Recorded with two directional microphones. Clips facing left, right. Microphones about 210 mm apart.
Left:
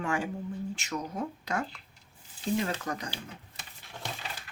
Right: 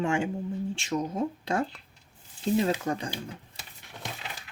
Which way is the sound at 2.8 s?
25° right (ahead or behind).